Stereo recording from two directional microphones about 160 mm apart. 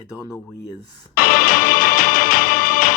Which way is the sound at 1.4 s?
55° left (ahead or behind).